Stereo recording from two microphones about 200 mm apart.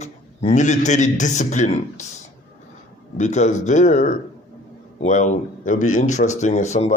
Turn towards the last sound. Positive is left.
turn(degrees=35)  # may be behind; listen again after turning